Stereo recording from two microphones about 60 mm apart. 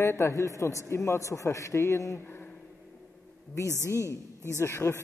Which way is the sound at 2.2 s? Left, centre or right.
Left.